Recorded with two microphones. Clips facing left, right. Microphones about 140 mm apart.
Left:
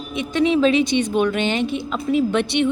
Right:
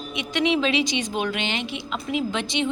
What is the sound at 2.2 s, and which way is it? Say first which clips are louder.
Speech: left 7 dB; 60° left (ahead or behind).